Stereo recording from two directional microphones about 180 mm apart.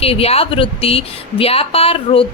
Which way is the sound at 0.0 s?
35° left (ahead or behind).